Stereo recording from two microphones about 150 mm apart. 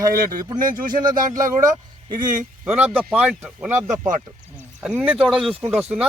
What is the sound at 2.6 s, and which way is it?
Speech, 10° right (ahead or behind).